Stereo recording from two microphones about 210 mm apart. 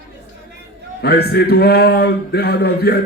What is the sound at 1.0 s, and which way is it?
Speech, 50° left (ahead or behind).